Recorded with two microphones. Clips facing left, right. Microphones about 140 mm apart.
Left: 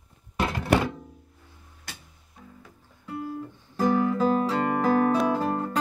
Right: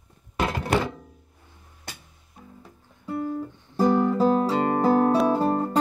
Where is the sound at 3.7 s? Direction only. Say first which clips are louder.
Right 3 dB; 40° right (ahead or behind).